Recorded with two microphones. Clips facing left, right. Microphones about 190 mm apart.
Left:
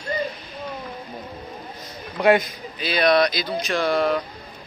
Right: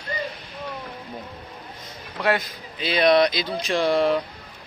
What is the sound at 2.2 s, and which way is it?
Speech, 15° left (ahead or behind).